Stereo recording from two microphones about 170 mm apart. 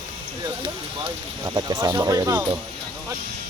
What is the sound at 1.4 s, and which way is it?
Speech, 25° right (ahead or behind).